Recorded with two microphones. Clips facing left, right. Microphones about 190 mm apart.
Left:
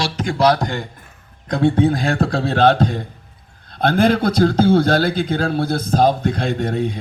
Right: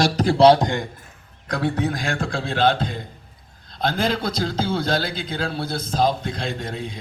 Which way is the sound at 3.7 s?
55° left (ahead or behind).